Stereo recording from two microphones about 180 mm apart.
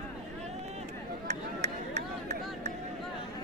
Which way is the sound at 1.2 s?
40° right (ahead or behind).